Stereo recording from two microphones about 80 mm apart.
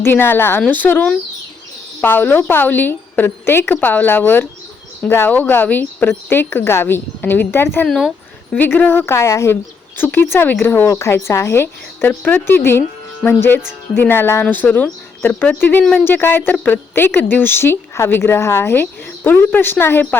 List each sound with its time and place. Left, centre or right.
0.0 s speech: left
7.9 s speech: centre
8.5 s speech: centre; by 9.6 s left
10.0 s speech: left
12.0 s speech: left